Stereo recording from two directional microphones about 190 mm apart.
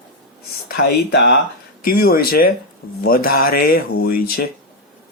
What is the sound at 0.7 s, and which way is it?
Speech, 60° left (ahead or behind).